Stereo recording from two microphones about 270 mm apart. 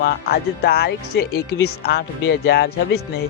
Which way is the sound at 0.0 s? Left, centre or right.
Left.